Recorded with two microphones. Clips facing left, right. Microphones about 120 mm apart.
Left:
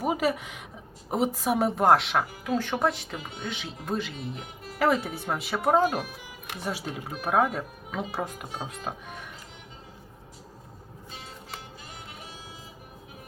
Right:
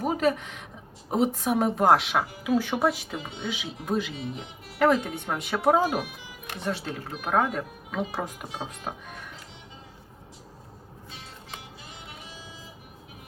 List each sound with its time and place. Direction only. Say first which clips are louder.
0.0 s a woman's voice: right 1 dB; 5° left (ahead or behind)
6.5 s a woman's voice: right 2 dB; 10° left (ahead or behind)